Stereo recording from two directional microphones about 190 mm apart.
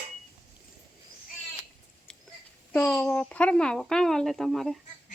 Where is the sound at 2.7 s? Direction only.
5° left (ahead or behind).